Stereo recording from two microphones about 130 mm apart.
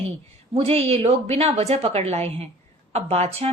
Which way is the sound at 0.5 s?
50° right (ahead or behind).